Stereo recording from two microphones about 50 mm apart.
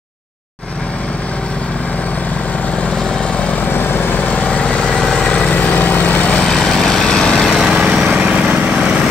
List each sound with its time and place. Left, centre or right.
3.7 s lawn mower: left
4.5 s vehicle: centre; by 6.4 s left
6.4 s vehicle: centre
7.7 s a sound: right
8.5 s vehicle: right